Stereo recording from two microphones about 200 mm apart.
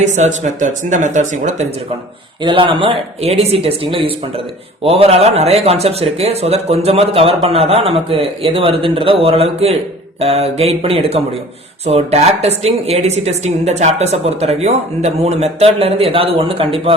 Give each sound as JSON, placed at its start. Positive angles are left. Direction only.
{"t": 0.0, "sound": "a woman's voice", "side_deg": -35}
{"t": 2.4, "sound": "a man's voice", "side_deg": -25}
{"t": 4.8, "sound": "a woman's voice", "side_deg": -30}